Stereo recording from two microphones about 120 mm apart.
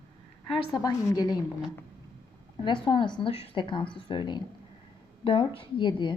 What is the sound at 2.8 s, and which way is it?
A woman's voice, 45° left (ahead or behind).